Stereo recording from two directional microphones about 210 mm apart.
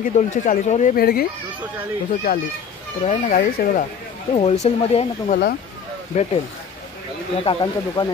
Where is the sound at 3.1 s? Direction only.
35° left (ahead or behind).